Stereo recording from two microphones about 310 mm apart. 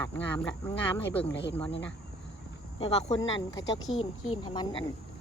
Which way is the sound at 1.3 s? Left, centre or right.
Left.